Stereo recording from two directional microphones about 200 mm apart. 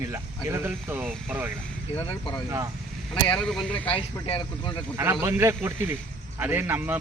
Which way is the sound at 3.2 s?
5° left (ahead or behind).